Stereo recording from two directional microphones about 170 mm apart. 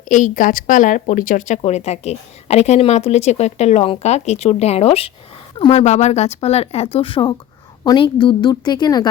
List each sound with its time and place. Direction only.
0.0 s a woman's voice: 50° left (ahead or behind); by 9.0 s 25° left (ahead or behind)